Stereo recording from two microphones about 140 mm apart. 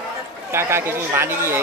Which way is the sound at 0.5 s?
15° right (ahead or behind).